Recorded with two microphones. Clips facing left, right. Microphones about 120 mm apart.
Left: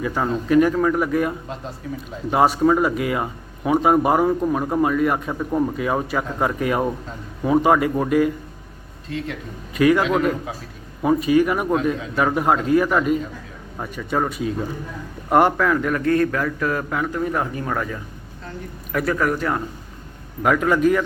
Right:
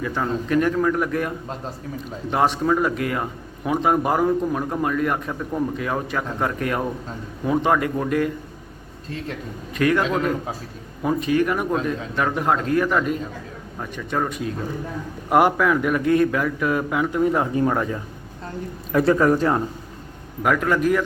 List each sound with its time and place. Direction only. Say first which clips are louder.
0.0 s a man's voice: left 2 dB; 10° left (ahead or behind)
2.3 s a man's voice: left 3 dB; 5° left (ahead or behind)
9.7 s a man's voice: left 3 dB; 5° left (ahead or behind); by 19.6 s 25° right (ahead or behind)
20.4 s a man's voice: left 2 dB; centre (ahead or behind)